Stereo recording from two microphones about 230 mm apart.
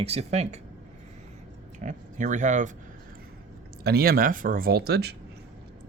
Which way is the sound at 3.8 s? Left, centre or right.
Right.